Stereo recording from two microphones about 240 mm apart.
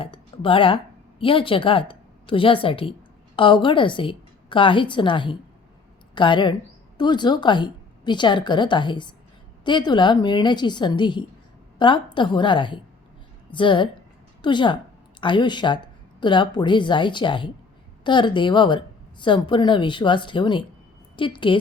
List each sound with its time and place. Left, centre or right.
0.0 s a woman's voice: left